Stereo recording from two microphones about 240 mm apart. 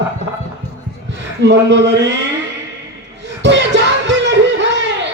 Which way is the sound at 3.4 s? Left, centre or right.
Right.